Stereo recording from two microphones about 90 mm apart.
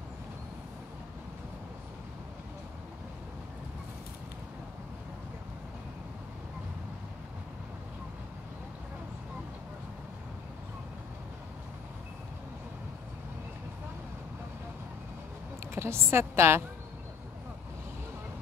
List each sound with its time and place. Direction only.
15.7 s a woman's voice: 30° right (ahead or behind)